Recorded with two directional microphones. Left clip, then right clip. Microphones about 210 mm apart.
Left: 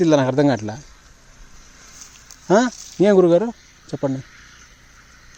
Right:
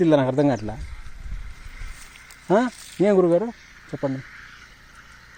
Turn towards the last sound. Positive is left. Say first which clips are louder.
# left 3 dB
turn(degrees=10)  # may be behind; listen again after turning